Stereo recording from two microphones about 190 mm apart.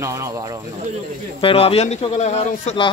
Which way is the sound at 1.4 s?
30° left (ahead or behind).